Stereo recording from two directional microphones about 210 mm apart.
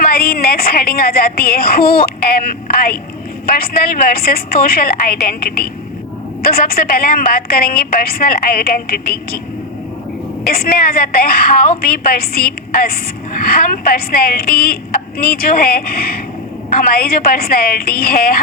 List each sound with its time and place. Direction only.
0.0 s a woman's voice: 45° left (ahead or behind)
10.4 s a woman's voice: 45° left (ahead or behind)